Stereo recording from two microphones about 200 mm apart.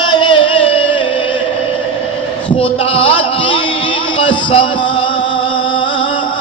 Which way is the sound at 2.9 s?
25° left (ahead or behind).